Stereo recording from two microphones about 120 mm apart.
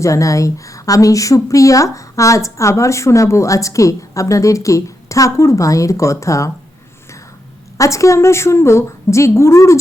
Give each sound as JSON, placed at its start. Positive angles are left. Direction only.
{"t": 0.0, "sound": "a woman's voice", "side_deg": 25}
{"t": 7.8, "sound": "a woman's voice", "side_deg": 25}